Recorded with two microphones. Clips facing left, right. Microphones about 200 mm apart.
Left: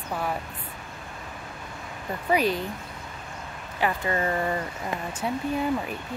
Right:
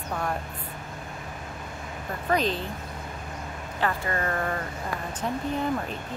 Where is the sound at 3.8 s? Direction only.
15° left (ahead or behind).